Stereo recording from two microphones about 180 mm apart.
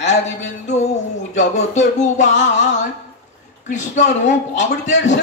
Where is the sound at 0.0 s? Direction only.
40° left (ahead or behind).